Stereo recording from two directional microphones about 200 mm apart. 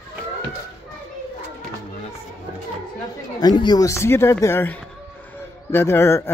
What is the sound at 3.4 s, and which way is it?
Speech, 20° left (ahead or behind).